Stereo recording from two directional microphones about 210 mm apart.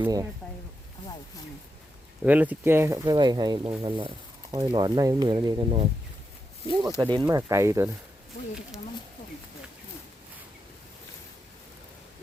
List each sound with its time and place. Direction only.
0.0 s speech: 15° right (ahead or behind)
2.2 s speech: 5° right (ahead or behind)
7.0 s speech: 20° right (ahead or behind)